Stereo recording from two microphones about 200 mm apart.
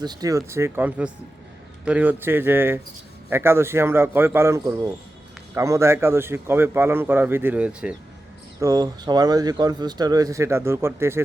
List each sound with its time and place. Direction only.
0.0 s a man's voice: 20° right (ahead or behind)
8.6 s speech: 20° right (ahead or behind)